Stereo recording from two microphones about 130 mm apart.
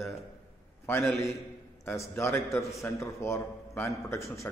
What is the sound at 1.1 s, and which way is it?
A man's voice, 25° left (ahead or behind).